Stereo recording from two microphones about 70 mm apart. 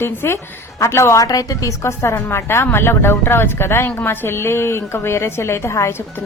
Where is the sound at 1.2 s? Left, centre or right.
Left.